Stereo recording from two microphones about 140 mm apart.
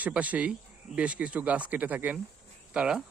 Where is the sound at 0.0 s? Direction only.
10° right (ahead or behind).